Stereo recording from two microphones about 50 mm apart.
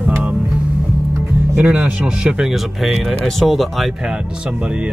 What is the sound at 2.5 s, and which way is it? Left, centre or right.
Speech, centre.